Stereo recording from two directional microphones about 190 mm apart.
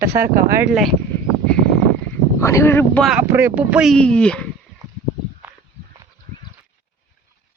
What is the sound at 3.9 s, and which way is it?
Speech, 5° left (ahead or behind).